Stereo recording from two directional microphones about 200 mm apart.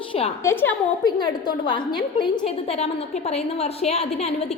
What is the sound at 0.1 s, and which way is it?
Speech, 30° left (ahead or behind).